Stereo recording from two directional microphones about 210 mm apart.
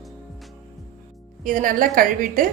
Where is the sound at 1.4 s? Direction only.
40° right (ahead or behind).